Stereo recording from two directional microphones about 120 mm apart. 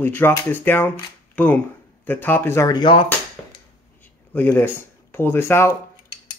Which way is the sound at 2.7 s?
40° left (ahead or behind).